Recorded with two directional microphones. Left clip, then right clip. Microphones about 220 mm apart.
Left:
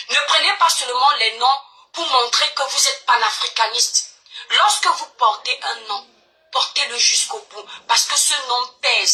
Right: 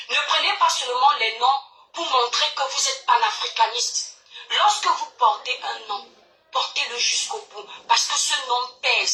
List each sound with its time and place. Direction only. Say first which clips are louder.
0.1 s speech: left 4 dB; 30° left (ahead or behind)